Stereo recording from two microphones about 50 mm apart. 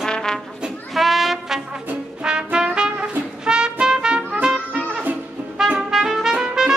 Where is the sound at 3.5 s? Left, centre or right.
Centre.